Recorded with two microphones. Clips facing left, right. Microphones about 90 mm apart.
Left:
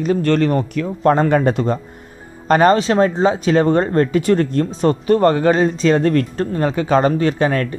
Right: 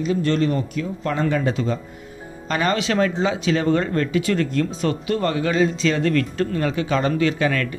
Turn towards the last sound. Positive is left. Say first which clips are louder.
# left 4 dB
turn(degrees=35)  # may be behind; listen again after turning